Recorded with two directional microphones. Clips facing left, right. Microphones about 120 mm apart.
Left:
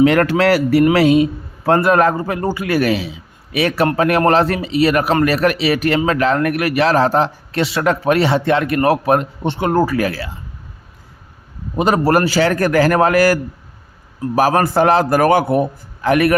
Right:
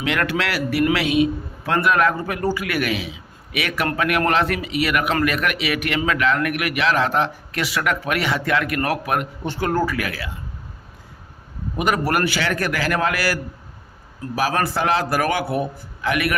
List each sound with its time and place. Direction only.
0.0 s a man's voice: 40° left (ahead or behind)
11.8 s a man's voice: 30° left (ahead or behind)